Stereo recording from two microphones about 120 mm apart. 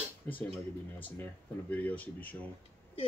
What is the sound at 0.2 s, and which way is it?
Speech, 20° left (ahead or behind).